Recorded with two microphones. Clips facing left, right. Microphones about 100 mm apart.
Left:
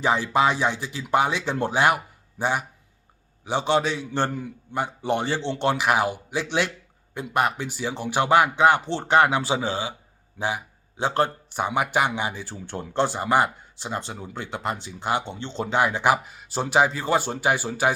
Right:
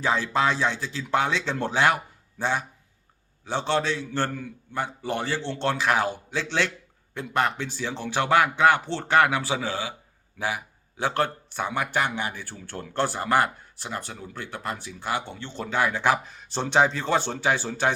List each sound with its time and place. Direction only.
0.0 s a man's voice: 15° left (ahead or behind)